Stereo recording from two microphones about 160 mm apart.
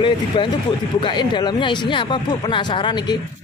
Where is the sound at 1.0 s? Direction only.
30° left (ahead or behind).